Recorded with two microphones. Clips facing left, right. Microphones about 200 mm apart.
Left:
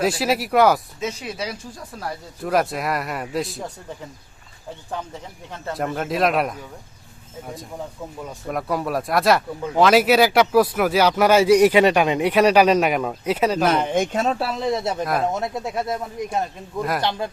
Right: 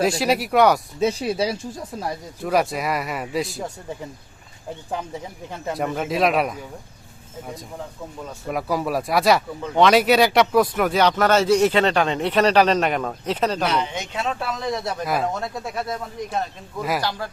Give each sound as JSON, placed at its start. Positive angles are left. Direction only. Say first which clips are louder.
{"t": 0.0, "sound": "a man's voice", "louder": "right 1 dB", "side_deg": 0}
{"t": 0.9, "sound": "speech", "louder": "right 7 dB", "side_deg": -35}
{"t": 2.4, "sound": "a man's voice", "louder": "even", "side_deg": 0}
{"t": 5.7, "sound": "a man's voice", "louder": "even", "side_deg": 0}
{"t": 8.4, "sound": "speech", "louder": "right 1 dB", "side_deg": 0}
{"t": 13.7, "sound": "speech", "louder": "left 5 dB", "side_deg": 50}
{"t": 15.0, "sound": "a man's voice", "louder": "right 1 dB", "side_deg": 0}
{"t": 15.3, "sound": "speech", "louder": "left 3 dB", "side_deg": 20}